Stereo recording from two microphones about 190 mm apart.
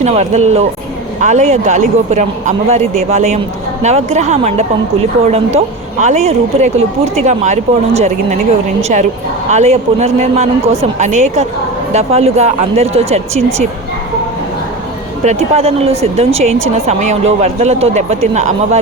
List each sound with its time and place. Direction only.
0.0 s a woman's voice: 35° right (ahead or behind)
15.2 s a woman's voice: 35° right (ahead or behind)